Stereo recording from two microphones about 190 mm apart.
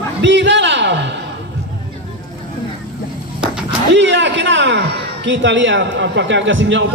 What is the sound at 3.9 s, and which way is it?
A man's voice, 70° right (ahead or behind).